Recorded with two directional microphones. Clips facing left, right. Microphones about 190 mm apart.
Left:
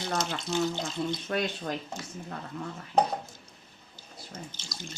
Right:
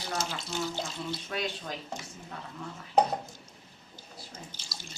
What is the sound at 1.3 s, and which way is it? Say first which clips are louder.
Speech: left 4 dB; 50° left (ahead or behind).